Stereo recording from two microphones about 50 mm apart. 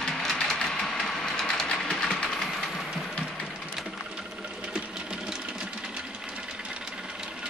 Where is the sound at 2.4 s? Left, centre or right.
Centre.